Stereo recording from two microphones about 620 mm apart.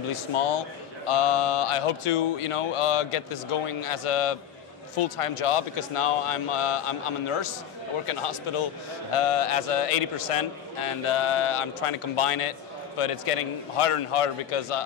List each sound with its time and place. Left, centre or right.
0.1 s a man's voice: left